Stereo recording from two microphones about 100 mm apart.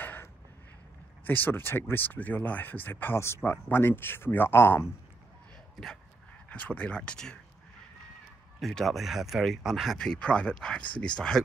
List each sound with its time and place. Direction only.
0.0 s a sound: 20° left (ahead or behind)
1.2 s speech: 20° left (ahead or behind)
6.5 s speech: 15° left (ahead or behind)
8.5 s speech: centre (ahead or behind)
9.9 s speech: 10° left (ahead or behind)